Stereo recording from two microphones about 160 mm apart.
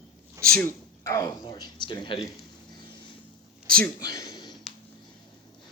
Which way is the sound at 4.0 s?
25° left (ahead or behind).